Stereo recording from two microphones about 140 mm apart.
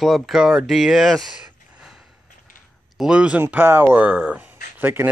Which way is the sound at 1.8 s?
5° right (ahead or behind).